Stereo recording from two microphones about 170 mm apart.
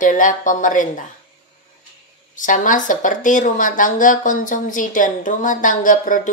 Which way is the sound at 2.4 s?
50° left (ahead or behind).